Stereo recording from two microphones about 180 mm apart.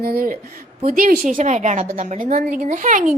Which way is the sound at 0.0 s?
55° right (ahead or behind).